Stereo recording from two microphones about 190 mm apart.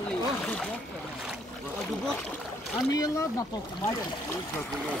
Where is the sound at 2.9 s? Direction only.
20° left (ahead or behind).